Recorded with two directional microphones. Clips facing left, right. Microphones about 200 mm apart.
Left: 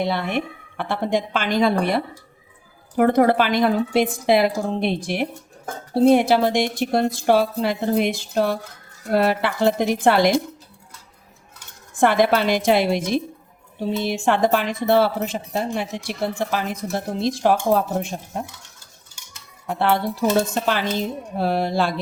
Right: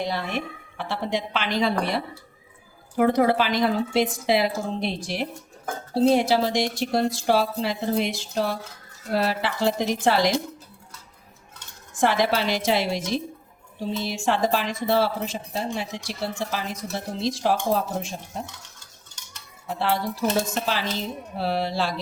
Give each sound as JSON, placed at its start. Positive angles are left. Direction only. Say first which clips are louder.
{"t": 0.0, "sound": "a woman's voice", "louder": "left 5 dB", "side_deg": 60}
{"t": 2.9, "sound": "a woman's voice", "louder": "left 3 dB", "side_deg": 55}
{"t": 11.9, "sound": "a woman's voice", "louder": "left 5 dB", "side_deg": 55}
{"t": 19.6, "sound": "a woman's voice", "louder": "left 4 dB", "side_deg": 60}